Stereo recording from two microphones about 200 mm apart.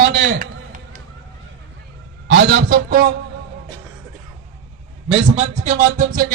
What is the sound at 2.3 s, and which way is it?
Speech, 60° right (ahead or behind).